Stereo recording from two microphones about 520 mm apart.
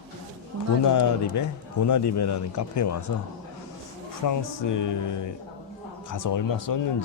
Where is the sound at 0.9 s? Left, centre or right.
Left.